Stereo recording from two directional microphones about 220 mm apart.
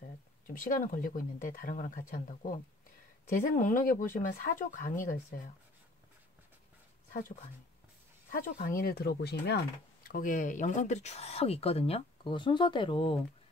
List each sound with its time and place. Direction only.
0.6 s speech: 40° left (ahead or behind)
3.5 s speech: 40° left (ahead or behind)
8.3 s speech: 40° left (ahead or behind)
10.0 s speech: 40° left (ahead or behind)